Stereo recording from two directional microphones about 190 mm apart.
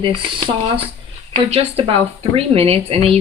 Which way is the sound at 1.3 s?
30° right (ahead or behind).